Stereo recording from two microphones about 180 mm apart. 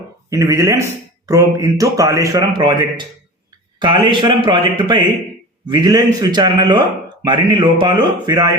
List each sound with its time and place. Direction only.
0.3 s speech: 15° right (ahead or behind)